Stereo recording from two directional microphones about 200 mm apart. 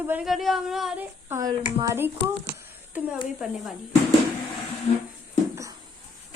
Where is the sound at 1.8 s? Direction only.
15° right (ahead or behind).